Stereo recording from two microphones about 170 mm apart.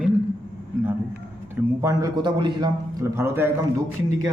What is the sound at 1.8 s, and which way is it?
A man's voice, 20° right (ahead or behind).